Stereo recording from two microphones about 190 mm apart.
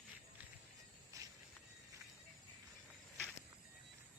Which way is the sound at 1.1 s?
15° right (ahead or behind).